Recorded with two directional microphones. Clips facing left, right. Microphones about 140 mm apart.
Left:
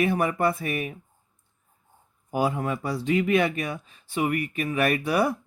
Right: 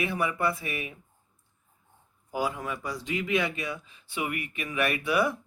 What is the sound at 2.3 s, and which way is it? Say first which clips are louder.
Speech: left 5 dB; 60° left (ahead or behind).